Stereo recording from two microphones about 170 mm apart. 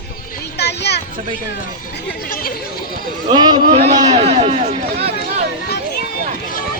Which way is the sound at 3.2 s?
25° right (ahead or behind).